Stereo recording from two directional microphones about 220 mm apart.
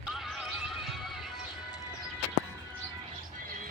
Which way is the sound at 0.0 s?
Centre (ahead or behind).